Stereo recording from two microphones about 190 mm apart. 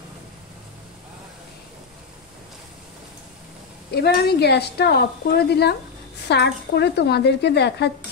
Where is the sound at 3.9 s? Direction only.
60° left (ahead or behind).